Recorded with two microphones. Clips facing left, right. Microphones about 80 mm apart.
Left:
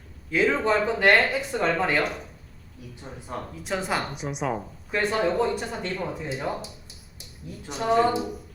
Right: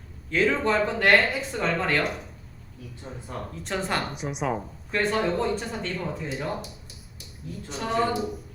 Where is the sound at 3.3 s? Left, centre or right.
Centre.